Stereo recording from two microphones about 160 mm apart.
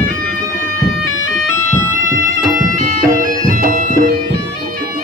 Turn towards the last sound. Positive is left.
turn(degrees=-60)  # may be behind; listen again after turning